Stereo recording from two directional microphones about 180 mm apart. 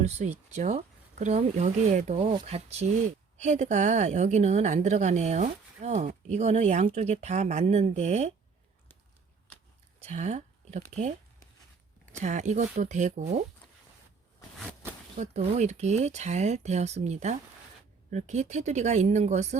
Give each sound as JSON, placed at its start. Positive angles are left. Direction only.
{"t": 0.0, "sound": "a woman's voice", "side_deg": -40}
{"t": 10.0, "sound": "speech", "side_deg": -40}
{"t": 12.2, "sound": "a woman's voice", "side_deg": -40}
{"t": 15.2, "sound": "a woman's voice", "side_deg": -40}